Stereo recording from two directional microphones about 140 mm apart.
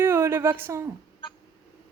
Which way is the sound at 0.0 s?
15° right (ahead or behind).